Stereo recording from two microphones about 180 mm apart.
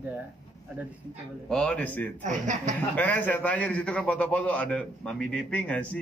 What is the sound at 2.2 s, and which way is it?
Speech, 45° right (ahead or behind).